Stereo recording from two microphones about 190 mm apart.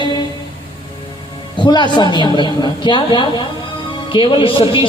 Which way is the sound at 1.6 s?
25° left (ahead or behind).